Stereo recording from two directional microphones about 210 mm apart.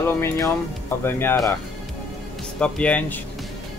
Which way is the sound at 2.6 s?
5° left (ahead or behind).